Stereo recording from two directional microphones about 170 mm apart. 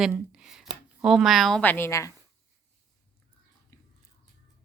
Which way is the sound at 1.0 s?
5° right (ahead or behind).